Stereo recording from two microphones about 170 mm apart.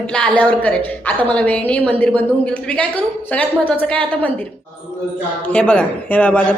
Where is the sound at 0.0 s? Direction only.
5° left (ahead or behind).